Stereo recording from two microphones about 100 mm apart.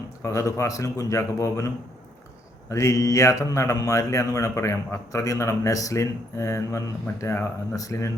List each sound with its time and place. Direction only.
0.2 s speech: 30° left (ahead or behind)